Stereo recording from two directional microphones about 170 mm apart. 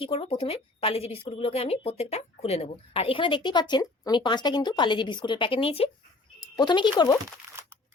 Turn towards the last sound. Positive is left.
turn(degrees=25)  # may be behind; listen again after turning